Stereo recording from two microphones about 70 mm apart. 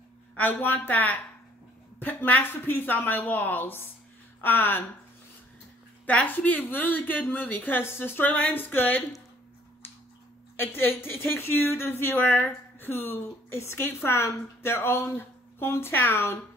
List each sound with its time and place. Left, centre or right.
0.4 s speech: left
6.0 s speech: left
10.5 s a woman's voice: left